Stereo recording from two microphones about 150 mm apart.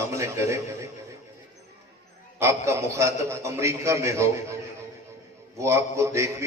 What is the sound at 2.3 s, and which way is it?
A man's voice, 20° right (ahead or behind).